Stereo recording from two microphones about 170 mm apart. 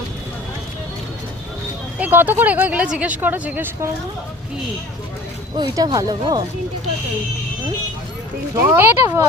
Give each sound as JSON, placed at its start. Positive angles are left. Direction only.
{"t": 2.0, "sound": "speech", "side_deg": -10}
{"t": 5.5, "sound": "speech", "side_deg": -25}
{"t": 8.7, "sound": "speech", "side_deg": -15}